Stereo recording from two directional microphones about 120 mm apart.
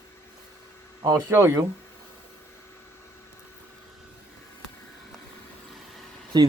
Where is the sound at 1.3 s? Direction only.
20° right (ahead or behind).